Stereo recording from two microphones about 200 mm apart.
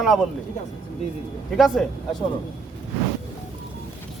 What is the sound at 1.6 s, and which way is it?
Speech, centre (ahead or behind).